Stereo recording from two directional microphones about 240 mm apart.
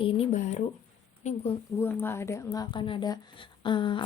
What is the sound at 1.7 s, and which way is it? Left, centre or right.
Speech, centre.